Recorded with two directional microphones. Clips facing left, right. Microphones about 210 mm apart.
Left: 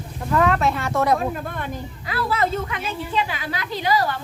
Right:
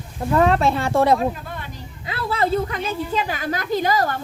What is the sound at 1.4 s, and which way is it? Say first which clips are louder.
Speech: left 5 dB; 50° left (ahead or behind).